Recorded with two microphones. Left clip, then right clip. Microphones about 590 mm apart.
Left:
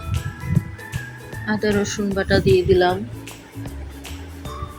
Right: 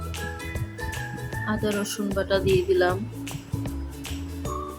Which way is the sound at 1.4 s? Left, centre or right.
Right.